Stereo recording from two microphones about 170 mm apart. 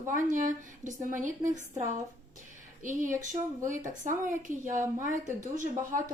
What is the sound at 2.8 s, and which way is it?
A woman's voice, 50° right (ahead or behind).